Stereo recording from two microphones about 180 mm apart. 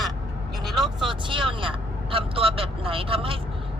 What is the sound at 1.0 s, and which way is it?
Speech, 25° right (ahead or behind).